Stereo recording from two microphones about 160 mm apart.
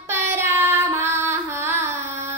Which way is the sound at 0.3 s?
15° right (ahead or behind).